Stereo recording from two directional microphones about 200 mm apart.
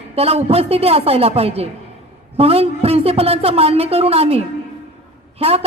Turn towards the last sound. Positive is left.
turn(degrees=-30)  # may be behind; listen again after turning